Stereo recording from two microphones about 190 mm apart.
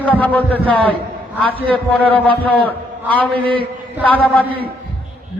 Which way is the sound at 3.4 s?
25° right (ahead or behind).